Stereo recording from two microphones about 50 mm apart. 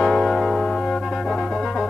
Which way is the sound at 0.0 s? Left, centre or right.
Centre.